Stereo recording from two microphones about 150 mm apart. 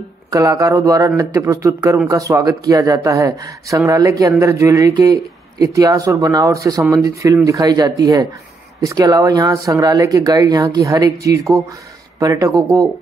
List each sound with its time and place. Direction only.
0.3 s speech: 20° right (ahead or behind)